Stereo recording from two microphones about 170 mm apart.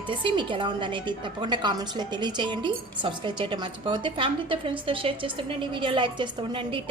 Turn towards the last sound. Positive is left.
turn(degrees=-30)  # may be behind; listen again after turning